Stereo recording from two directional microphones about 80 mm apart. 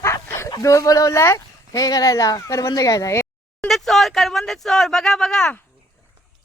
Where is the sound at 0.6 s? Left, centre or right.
Left.